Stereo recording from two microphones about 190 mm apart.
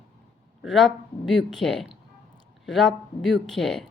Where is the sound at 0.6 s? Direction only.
Centre (ahead or behind).